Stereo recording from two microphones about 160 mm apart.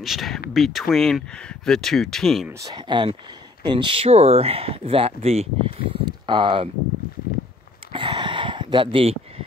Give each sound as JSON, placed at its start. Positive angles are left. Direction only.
{"t": 0.0, "sound": "speech", "side_deg": 0}
{"t": 2.6, "sound": "speech", "side_deg": -25}
{"t": 7.9, "sound": "a sound", "side_deg": -30}